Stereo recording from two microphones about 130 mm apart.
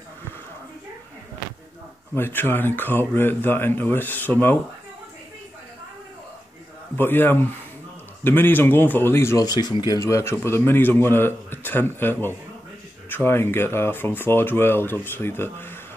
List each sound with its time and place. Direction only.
2.1 s a man's voice: 15° left (ahead or behind)
7.0 s a man's voice: 15° left (ahead or behind)
9.4 s a man's voice: 30° left (ahead or behind)